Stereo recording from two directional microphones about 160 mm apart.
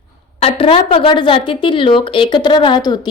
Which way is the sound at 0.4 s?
35° left (ahead or behind).